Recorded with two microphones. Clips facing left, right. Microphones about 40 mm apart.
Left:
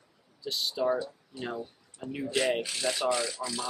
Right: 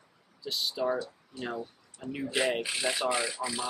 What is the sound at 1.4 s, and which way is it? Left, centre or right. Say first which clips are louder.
Speech: even; centre.